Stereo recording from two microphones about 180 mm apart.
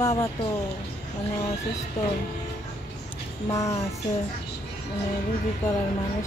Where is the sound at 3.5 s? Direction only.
20° left (ahead or behind).